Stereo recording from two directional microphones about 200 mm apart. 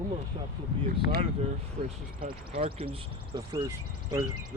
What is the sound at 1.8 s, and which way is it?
Speech, 40° right (ahead or behind).